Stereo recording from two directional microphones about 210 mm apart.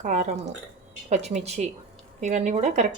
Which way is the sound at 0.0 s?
35° right (ahead or behind).